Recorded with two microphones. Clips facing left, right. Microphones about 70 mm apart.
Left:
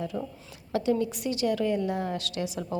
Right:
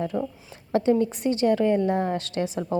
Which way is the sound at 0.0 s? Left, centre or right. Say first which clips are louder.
Right 5 dB; right.